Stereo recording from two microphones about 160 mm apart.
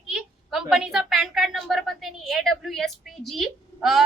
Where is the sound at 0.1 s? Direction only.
Centre (ahead or behind).